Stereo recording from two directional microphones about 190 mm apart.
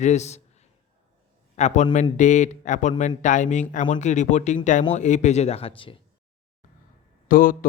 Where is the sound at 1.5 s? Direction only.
40° left (ahead or behind).